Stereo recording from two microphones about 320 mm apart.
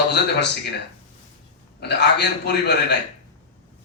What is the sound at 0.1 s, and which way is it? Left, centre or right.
Speech, left.